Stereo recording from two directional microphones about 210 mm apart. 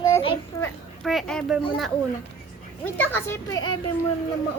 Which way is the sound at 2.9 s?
10° left (ahead or behind).